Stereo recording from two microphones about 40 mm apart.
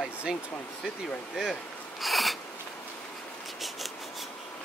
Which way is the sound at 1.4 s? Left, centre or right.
Centre.